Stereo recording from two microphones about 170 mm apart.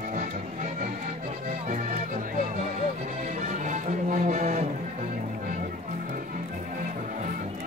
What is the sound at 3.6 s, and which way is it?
Music, 50° right (ahead or behind).